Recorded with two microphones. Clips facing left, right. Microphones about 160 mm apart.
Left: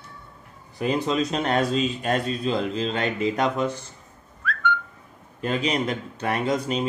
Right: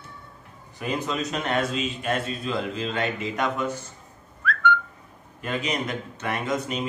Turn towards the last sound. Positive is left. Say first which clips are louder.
# left 3 dB
turn(degrees=35)  # may be behind; listen again after turning